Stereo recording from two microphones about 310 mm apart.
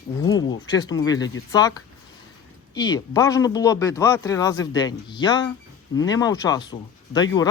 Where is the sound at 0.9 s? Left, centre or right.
Centre.